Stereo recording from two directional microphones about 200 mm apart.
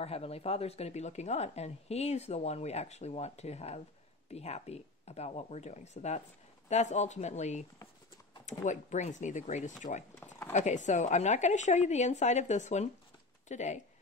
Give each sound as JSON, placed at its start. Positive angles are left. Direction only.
{"t": 0.0, "sound": "a woman's voice", "side_deg": 30}